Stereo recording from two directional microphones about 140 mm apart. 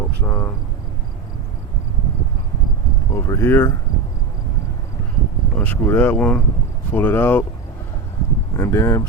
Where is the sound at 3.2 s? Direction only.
20° left (ahead or behind).